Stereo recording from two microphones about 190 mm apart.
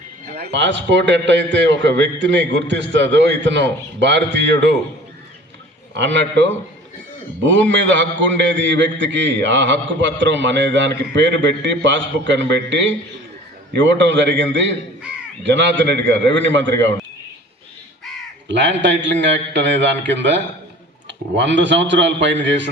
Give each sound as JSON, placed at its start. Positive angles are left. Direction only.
{"t": 0.3, "sound": "a man's voice", "side_deg": -55}
{"t": 5.9, "sound": "a man's voice", "side_deg": -70}
{"t": 7.7, "sound": "a man's voice", "side_deg": -70}
{"t": 18.4, "sound": "a man's voice", "side_deg": -70}